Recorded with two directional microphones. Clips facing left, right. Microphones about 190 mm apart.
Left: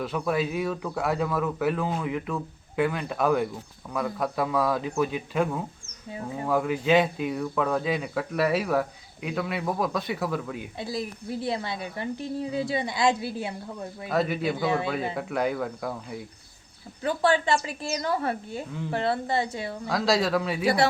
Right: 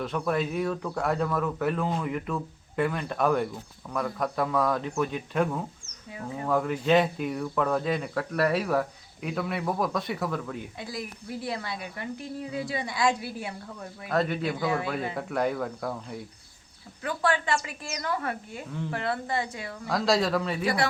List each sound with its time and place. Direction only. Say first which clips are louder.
0.0 s speech: left 1 dB; 5° left (ahead or behind)
6.1 s a woman's voice: left 2 dB; 25° left (ahead or behind)
6.4 s speech: left 1 dB; 5° left (ahead or behind)
10.8 s a woman's voice: left 5 dB; 30° left (ahead or behind)
14.1 s speech: left 1 dB; 5° left (ahead or behind)
14.6 s a woman's voice: left 2 dB; 25° left (ahead or behind)
15.1 s speech: left 1 dB; centre (ahead or behind)
17.0 s a woman's voice: left 4 dB; 30° left (ahead or behind)
19.9 s speech: left 1 dB; centre (ahead or behind)